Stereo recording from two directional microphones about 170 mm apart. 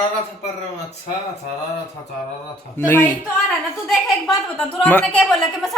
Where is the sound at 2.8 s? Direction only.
15° left (ahead or behind).